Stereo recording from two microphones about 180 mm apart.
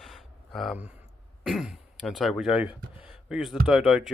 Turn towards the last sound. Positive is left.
turn(degrees=0)  # may be behind; listen again after turning